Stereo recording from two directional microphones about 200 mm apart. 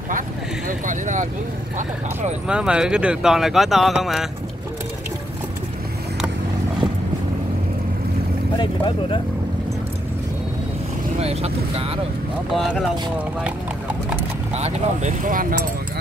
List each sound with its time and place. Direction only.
0.7 s a sound: 40° right (ahead or behind)
2.4 s speech: 5° right (ahead or behind)
8.5 s speech: 25° left (ahead or behind)
11.1 s speech: 30° right (ahead or behind)
12.5 s speech: centre (ahead or behind)
14.5 s speech: 35° right (ahead or behind)